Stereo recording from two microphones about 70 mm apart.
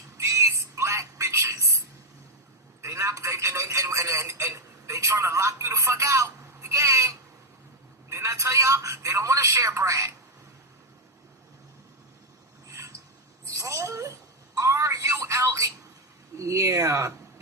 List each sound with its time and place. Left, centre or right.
0.2 s a sound: right
2.8 s telephone: right
5.2 s a man's voice: right
12.6 s a sound: right
13.4 s telephone: right
16.4 s speech: right